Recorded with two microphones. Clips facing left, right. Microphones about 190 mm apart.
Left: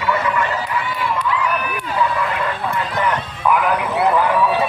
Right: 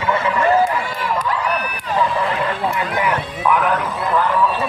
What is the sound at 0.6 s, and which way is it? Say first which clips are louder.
Run: right 1 dB; 45° right (ahead or behind).